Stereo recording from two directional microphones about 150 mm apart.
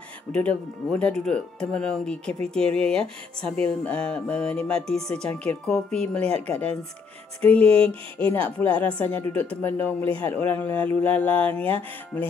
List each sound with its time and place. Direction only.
0.3 s speech: 5° left (ahead or behind)
8.5 s speech: 10° left (ahead or behind)